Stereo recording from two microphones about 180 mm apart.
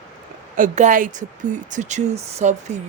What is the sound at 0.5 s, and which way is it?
Speech, 45° right (ahead or behind).